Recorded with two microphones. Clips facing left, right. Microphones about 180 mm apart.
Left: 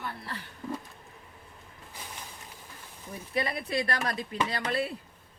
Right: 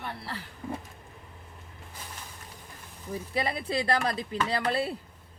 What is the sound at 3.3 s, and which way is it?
Speech, 30° right (ahead or behind).